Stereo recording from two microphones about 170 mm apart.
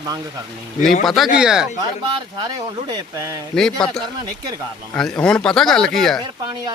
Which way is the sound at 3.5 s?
5° left (ahead or behind).